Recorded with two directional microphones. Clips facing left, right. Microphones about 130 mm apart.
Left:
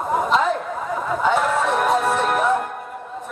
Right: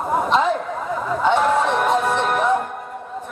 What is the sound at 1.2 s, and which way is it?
Music, 5° left (ahead or behind).